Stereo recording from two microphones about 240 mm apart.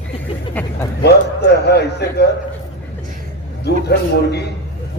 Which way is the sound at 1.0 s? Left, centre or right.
Left.